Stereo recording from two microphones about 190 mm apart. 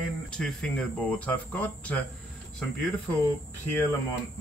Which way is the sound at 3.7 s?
10° left (ahead or behind).